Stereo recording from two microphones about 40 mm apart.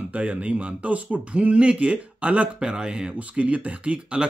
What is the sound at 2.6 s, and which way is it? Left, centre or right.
Speech, right.